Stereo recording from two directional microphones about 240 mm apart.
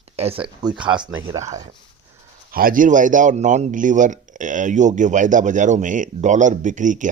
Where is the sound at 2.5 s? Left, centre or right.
Right.